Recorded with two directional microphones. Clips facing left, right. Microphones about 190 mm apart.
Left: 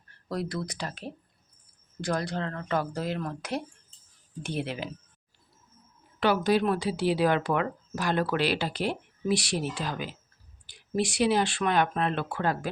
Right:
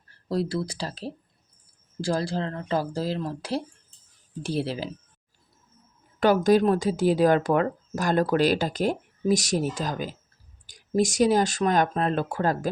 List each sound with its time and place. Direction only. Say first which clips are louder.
0.3 s speech: right 5 dB; 30° right (ahead or behind)
6.1 s speech: right 5 dB; 45° right (ahead or behind)